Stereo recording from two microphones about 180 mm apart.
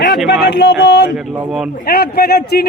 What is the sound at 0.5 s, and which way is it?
Speech, 70° left (ahead or behind).